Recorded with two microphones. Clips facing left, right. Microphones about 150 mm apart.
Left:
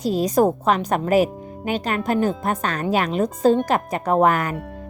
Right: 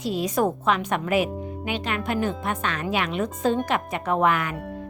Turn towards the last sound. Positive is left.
turn(degrees=40)  # may be behind; listen again after turning